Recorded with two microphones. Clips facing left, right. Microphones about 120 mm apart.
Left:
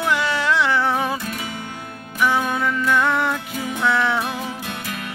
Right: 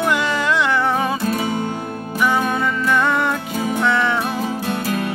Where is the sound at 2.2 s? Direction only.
Centre (ahead or behind).